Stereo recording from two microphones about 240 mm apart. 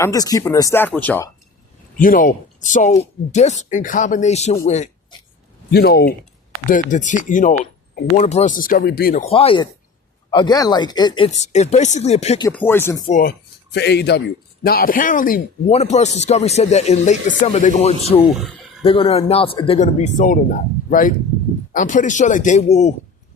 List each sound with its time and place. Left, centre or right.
0.0 s speech: centre
2.0 s speech: left
5.7 s speech: left
9.2 s speech: left
11.3 s speech: left
12.5 s speech: centre
13.1 s speech: left
13.7 s a man's voice: left
18.3 s speech: centre
18.8 s speech: left